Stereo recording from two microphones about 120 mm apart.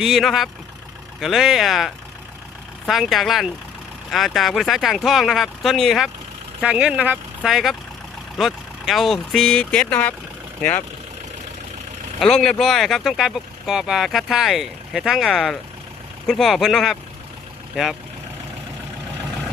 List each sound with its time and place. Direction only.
0.0 s speech: centre (ahead or behind)
9.6 s speech: 15° left (ahead or behind)
12.2 s speech: 5° left (ahead or behind)